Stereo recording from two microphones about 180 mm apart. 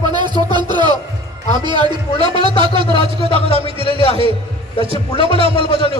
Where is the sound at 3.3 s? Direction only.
35° left (ahead or behind).